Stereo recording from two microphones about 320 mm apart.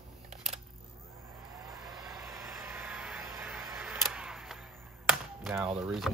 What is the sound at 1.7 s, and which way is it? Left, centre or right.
Vehicle, centre.